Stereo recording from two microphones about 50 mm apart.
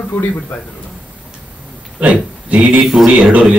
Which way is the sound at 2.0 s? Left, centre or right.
Right.